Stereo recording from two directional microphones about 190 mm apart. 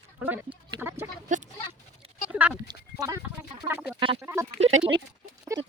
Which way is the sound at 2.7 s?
20° right (ahead or behind).